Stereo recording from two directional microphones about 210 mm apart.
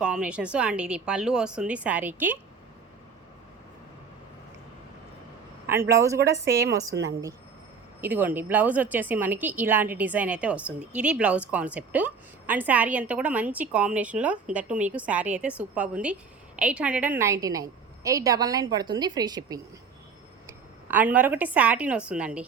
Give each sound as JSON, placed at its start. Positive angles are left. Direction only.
{"t": 0.0, "sound": "a woman's voice", "side_deg": -5}
{"t": 5.6, "sound": "a woman's voice", "side_deg": -10}
{"t": 6.1, "sound": "a woman's voice", "side_deg": -55}
{"t": 7.0, "sound": "a woman's voice", "side_deg": -15}